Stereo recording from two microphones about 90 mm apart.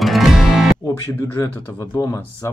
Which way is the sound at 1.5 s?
25° left (ahead or behind).